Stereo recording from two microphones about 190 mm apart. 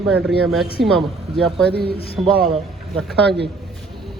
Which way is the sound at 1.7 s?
55° right (ahead or behind).